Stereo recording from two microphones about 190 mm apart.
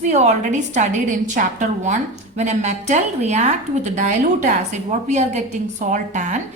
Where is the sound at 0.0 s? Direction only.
40° right (ahead or behind).